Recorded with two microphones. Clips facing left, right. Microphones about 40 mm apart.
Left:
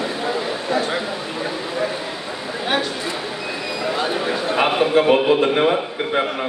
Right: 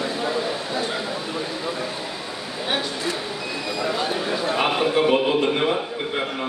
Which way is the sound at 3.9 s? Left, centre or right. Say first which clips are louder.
Left 4 dB; centre.